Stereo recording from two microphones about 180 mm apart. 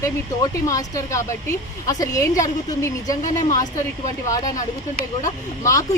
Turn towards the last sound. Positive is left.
turn(degrees=15)  # may be behind; listen again after turning